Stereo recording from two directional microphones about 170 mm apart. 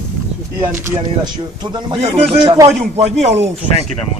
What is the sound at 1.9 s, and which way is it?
Speech, 35° right (ahead or behind).